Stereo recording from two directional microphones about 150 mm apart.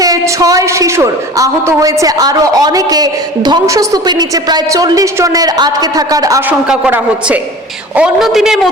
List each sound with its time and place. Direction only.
0.0 s a woman's voice: 25° right (ahead or behind)
6.5 s a man's voice: 10° right (ahead or behind)